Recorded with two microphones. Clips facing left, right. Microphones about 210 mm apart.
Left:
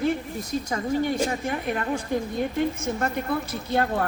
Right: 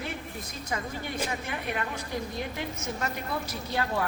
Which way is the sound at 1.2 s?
45° left (ahead or behind).